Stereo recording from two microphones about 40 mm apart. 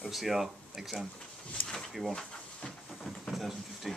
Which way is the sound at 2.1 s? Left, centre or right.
Centre.